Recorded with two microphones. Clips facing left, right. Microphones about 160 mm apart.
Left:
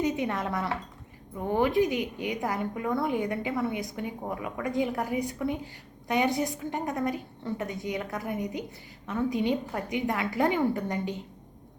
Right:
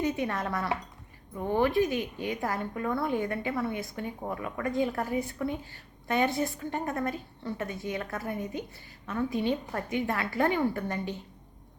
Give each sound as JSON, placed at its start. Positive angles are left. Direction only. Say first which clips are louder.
{"t": 0.0, "sound": "a woman's voice", "louder": "left 1 dB", "side_deg": 20}